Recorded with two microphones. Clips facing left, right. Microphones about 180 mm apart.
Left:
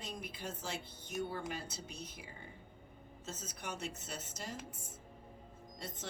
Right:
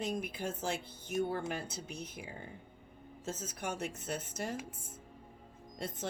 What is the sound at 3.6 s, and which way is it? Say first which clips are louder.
Speech: right 5 dB; 55° right (ahead or behind).